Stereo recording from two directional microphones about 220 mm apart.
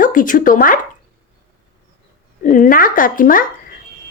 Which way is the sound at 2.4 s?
35° left (ahead or behind).